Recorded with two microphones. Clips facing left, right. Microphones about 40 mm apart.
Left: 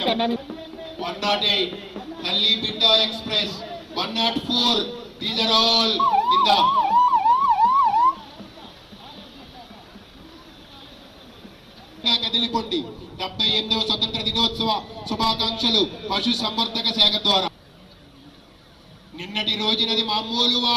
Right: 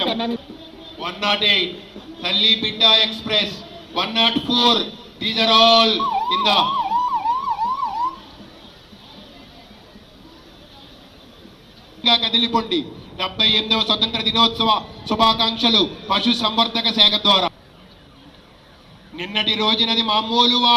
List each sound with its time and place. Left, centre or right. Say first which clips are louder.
0.1 s speech: left 1 dB; left
0.9 s a man's voice: right 2 dB; right
1.7 s a sound: left 2 dB; left
2.2 s a man's voice: right 4 dB; right
6.7 s emergency vehicle: left 3 dB; left
12.0 s a man's voice: right 5 dB; right
19.1 s a man's voice: right 4 dB; right